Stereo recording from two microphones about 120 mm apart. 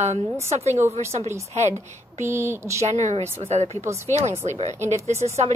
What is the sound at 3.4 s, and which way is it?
A woman's voice, 60° right (ahead or behind).